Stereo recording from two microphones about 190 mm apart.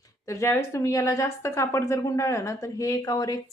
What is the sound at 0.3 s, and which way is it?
Speech, 15° left (ahead or behind).